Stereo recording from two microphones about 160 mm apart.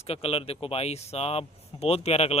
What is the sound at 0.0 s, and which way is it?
Speech, 35° left (ahead or behind).